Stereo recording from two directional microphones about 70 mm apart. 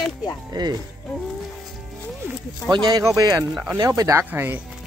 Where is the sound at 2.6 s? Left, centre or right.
Right.